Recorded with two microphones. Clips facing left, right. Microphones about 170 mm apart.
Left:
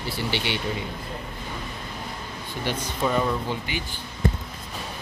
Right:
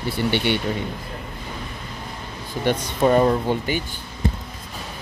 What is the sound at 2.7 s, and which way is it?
Speech, 50° right (ahead or behind).